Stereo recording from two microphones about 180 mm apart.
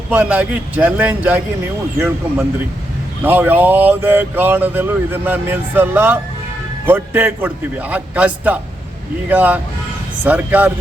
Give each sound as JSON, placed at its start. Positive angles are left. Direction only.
{"t": 0.1, "sound": "speech", "side_deg": -10}